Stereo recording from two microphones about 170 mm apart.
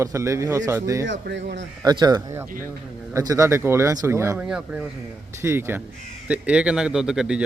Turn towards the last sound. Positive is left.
turn(degrees=-5)  # may be behind; listen again after turning